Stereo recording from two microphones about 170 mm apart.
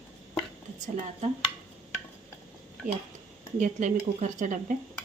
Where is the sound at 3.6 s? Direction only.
50° right (ahead or behind).